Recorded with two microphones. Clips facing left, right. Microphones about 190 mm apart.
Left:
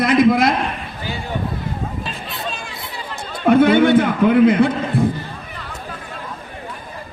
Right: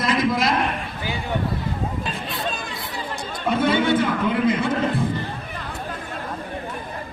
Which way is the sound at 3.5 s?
60° left (ahead or behind).